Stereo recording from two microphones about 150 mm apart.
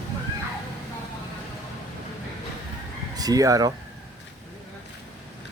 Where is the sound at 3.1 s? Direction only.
25° right (ahead or behind).